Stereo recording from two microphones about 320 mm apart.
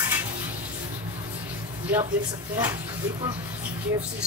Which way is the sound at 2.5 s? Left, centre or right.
Centre.